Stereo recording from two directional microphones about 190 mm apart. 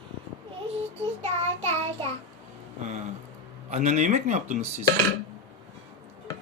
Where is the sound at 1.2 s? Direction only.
35° right (ahead or behind).